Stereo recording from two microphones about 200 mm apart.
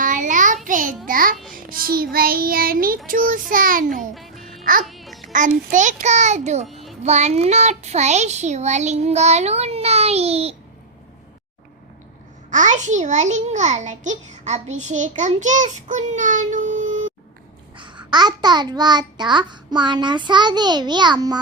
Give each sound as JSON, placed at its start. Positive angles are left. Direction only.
{"t": 0.0, "sound": "child singing", "side_deg": -40}
{"t": 4.1, "sound": "music", "side_deg": 0}
{"t": 4.6, "sound": "speech", "side_deg": -45}
{"t": 4.9, "sound": "babbling", "side_deg": 0}
{"t": 5.3, "sound": "a child's voice", "side_deg": -40}
{"t": 12.5, "sound": "a child's voice", "side_deg": -40}
{"t": 17.7, "sound": "a child's voice", "side_deg": -20}